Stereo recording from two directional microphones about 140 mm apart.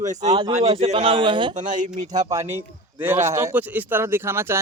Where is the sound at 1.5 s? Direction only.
65° right (ahead or behind).